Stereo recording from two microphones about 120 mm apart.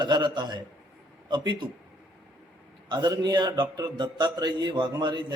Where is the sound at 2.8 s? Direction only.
35° right (ahead or behind).